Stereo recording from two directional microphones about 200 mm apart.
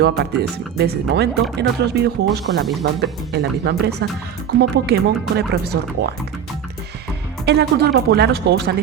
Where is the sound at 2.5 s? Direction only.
65° right (ahead or behind).